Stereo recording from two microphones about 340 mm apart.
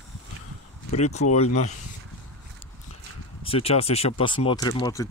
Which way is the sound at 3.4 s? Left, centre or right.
Centre.